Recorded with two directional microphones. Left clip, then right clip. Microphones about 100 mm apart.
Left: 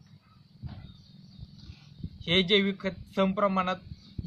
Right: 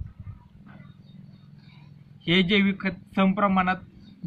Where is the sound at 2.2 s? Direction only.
30° left (ahead or behind).